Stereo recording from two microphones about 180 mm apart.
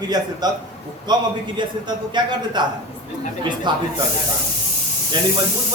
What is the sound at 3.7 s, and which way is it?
Speech, 25° right (ahead or behind).